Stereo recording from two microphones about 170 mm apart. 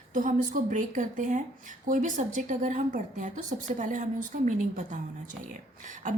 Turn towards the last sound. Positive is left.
turn(degrees=-50)  # may be behind; listen again after turning